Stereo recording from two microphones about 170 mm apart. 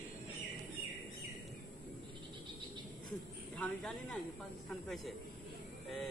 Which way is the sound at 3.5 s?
5° left (ahead or behind).